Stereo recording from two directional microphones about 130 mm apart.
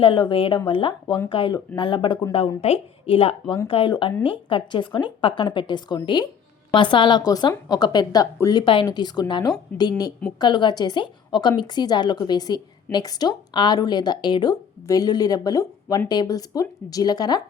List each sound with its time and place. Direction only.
0.0 s a woman's voice: 40° left (ahead or behind)
2.6 s a woman's voice: 50° left (ahead or behind); by 9.5 s 35° left (ahead or behind)
9.7 s a woman's voice: 10° left (ahead or behind)
10.4 s a woman's voice: 35° left (ahead or behind)